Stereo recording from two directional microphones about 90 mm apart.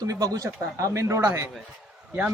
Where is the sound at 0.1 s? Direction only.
40° right (ahead or behind).